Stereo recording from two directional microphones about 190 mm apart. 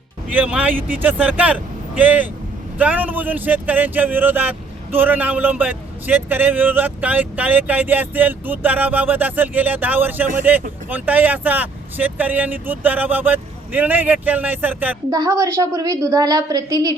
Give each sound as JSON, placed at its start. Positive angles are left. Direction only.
{"t": 0.3, "sound": "a woman's voice", "side_deg": -5}